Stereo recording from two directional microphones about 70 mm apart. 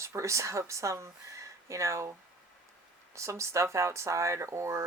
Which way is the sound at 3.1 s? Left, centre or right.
Right.